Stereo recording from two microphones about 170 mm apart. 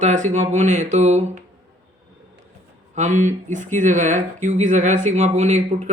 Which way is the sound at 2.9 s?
45° right (ahead or behind).